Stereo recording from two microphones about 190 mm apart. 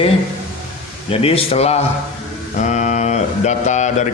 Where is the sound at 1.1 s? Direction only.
30° left (ahead or behind).